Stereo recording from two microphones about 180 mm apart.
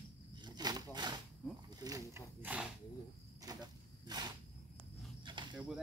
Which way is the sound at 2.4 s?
5° right (ahead or behind).